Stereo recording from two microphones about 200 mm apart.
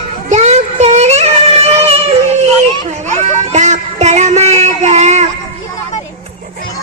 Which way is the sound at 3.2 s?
35° right (ahead or behind).